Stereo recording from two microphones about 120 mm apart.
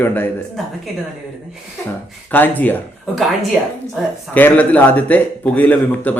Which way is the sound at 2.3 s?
15° left (ahead or behind).